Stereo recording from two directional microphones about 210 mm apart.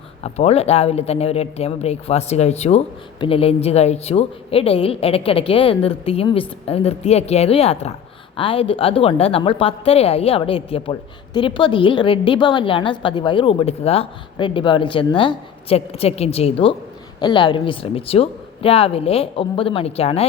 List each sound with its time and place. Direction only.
0.2 s speech: 30° left (ahead or behind)